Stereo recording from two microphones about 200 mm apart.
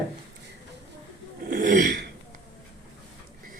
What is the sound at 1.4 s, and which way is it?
Speech, 40° right (ahead or behind).